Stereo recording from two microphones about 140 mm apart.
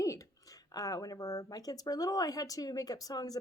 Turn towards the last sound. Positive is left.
turn(degrees=25)  # may be behind; listen again after turning